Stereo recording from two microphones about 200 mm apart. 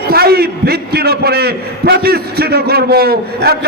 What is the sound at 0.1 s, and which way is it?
A man's voice, 50° right (ahead or behind).